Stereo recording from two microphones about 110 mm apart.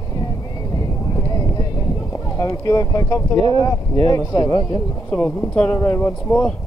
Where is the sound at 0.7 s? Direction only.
35° left (ahead or behind).